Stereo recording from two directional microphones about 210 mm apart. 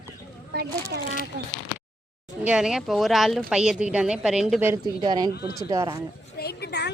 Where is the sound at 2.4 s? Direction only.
5° right (ahead or behind).